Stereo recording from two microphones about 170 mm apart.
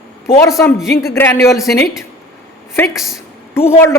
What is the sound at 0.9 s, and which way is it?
Speech, 20° left (ahead or behind).